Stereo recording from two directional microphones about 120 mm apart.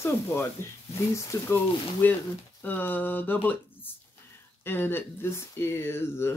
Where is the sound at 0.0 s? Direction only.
20° left (ahead or behind).